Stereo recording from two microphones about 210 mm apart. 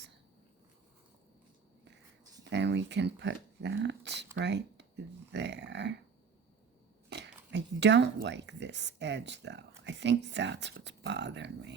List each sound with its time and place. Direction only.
2.4 s speech: 55° right (ahead or behind)
7.1 s speech: 55° right (ahead or behind)